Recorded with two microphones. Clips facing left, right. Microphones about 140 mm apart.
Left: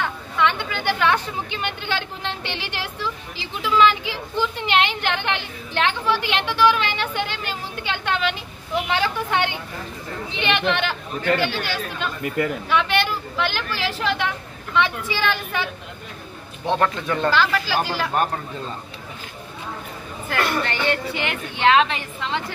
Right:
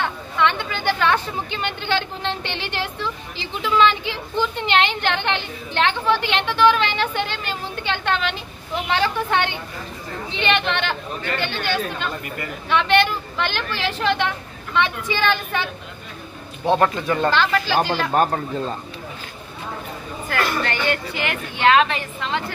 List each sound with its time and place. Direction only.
0.4 s a woman's voice: 10° left (ahead or behind)
16.6 s a woman's voice: 5° right (ahead or behind)
17.3 s a woman's voice: 5° left (ahead or behind)
18.1 s speech: 40° right (ahead or behind)
20.2 s a woman's voice: 25° left (ahead or behind)